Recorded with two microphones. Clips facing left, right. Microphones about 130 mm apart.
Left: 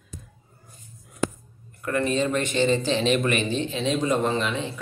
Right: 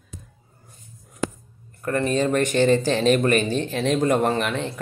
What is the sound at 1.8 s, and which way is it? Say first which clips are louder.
Speech: right 2 dB; 40° right (ahead or behind).